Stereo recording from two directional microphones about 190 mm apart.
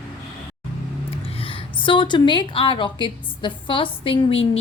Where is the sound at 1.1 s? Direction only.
30° left (ahead or behind).